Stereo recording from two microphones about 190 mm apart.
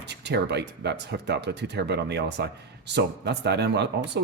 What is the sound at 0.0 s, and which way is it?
Speech, 65° right (ahead or behind).